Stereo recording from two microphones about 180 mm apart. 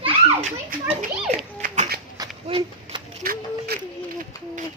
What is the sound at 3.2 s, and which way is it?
Speech, 55° right (ahead or behind).